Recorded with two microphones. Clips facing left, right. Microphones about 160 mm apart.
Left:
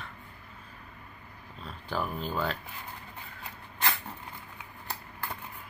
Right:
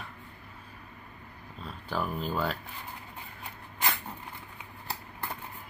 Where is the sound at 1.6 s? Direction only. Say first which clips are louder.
Even; centre (ahead or behind).